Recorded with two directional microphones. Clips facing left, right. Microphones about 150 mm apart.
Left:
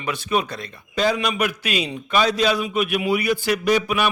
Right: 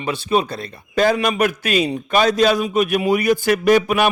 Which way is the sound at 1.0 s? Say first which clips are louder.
Right 4 dB; 50° right (ahead or behind).